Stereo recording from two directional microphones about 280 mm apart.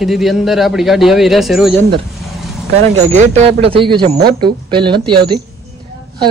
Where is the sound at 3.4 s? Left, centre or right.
Right.